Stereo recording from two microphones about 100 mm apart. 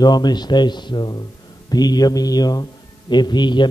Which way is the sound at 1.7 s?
40° left (ahead or behind).